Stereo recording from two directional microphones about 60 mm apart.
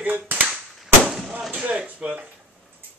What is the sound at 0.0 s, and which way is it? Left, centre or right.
Cap gun, right.